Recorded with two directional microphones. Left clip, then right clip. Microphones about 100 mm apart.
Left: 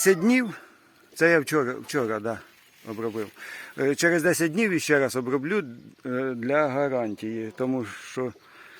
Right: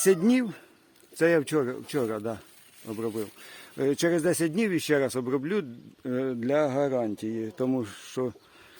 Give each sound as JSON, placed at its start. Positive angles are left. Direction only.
{"t": 0.0, "sound": "a man's voice", "side_deg": -15}
{"t": 6.1, "sound": "speech", "side_deg": -20}